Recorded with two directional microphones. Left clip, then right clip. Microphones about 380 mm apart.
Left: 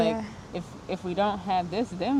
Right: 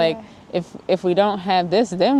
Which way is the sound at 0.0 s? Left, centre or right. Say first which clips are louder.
Right 6 dB; right.